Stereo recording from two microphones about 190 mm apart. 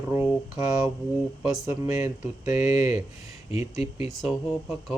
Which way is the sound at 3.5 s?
35° left (ahead or behind).